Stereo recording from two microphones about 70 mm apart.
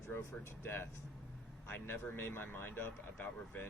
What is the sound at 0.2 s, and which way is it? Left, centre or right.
Speech, left.